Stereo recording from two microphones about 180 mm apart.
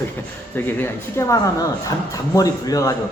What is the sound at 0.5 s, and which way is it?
A man's voice, 10° left (ahead or behind).